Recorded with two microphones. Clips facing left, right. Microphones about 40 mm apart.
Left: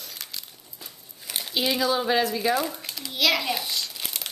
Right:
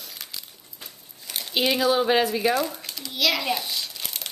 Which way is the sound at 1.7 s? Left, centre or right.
Centre.